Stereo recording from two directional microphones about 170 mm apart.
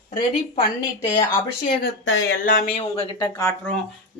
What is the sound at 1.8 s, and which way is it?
Speech, 90° left.